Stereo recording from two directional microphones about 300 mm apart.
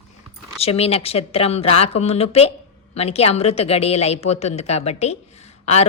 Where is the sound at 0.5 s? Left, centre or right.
Centre.